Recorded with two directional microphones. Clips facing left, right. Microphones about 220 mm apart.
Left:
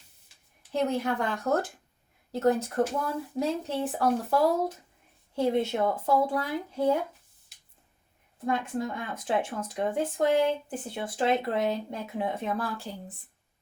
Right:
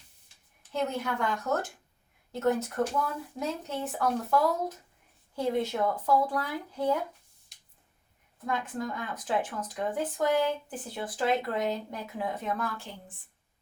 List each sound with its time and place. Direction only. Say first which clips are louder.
0.7 s speech: left 4 dB; 30° left (ahead or behind)
2.3 s speech: left 3 dB; 30° left (ahead or behind)
8.4 s speech: left 3 dB; 25° left (ahead or behind)